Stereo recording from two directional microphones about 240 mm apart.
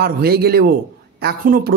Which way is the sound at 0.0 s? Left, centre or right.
Right.